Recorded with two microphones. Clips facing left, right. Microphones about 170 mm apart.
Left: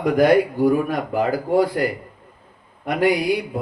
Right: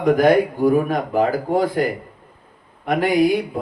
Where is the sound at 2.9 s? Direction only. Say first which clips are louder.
Right 2 dB; 50° right (ahead or behind).